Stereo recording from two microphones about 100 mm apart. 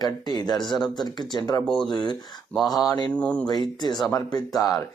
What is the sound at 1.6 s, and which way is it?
Speech, 5° left (ahead or behind).